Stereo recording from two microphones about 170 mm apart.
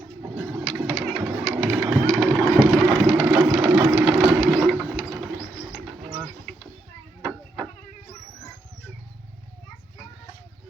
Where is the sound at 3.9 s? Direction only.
5° right (ahead or behind).